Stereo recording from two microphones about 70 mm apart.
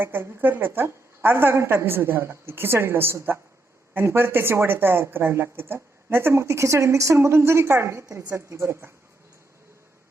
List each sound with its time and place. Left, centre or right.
0.0 s a woman's voice: right